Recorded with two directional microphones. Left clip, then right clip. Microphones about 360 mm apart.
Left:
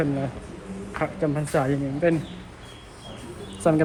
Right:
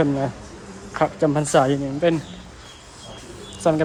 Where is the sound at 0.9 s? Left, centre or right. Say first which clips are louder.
Right 6 dB; centre.